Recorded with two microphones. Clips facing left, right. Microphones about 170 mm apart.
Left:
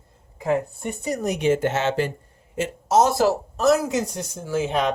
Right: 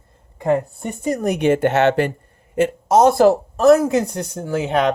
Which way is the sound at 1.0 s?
55° right (ahead or behind).